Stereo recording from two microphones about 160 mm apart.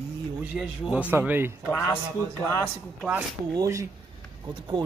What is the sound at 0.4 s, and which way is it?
A man's voice, 5° right (ahead or behind).